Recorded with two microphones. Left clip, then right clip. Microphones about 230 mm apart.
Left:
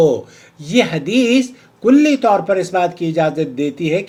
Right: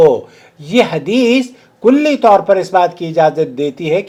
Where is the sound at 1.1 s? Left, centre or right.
Right.